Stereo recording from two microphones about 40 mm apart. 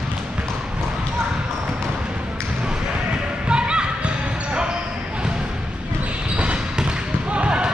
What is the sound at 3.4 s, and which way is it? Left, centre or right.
Basketball bounce, right.